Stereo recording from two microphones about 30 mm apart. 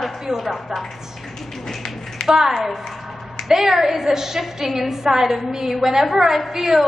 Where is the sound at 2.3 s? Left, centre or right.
Centre.